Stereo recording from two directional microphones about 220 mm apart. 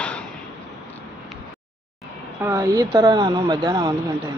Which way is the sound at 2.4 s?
15° right (ahead or behind).